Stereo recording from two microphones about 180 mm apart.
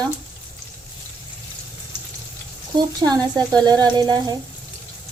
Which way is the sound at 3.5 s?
20° right (ahead or behind).